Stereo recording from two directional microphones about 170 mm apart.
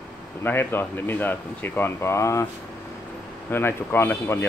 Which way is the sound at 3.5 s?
15° left (ahead or behind).